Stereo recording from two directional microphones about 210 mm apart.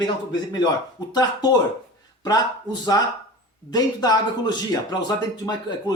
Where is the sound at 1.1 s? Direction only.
20° left (ahead or behind).